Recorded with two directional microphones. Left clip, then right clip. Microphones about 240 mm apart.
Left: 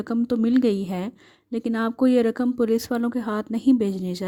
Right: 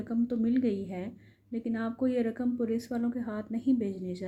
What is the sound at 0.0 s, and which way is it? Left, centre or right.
A woman's voice, left.